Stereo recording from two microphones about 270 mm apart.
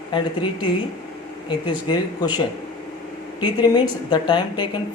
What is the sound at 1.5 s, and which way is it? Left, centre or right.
Speech, centre.